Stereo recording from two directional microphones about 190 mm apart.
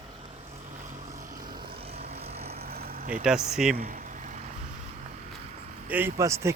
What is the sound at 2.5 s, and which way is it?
Vehicle, 55° right (ahead or behind).